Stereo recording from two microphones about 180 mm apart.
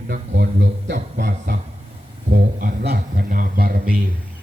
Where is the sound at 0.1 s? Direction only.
65° right (ahead or behind).